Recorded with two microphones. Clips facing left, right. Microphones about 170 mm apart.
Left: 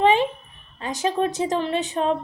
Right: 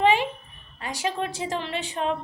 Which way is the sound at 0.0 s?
20° left (ahead or behind).